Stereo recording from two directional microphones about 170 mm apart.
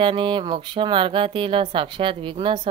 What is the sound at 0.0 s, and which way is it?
Speech, 30° right (ahead or behind).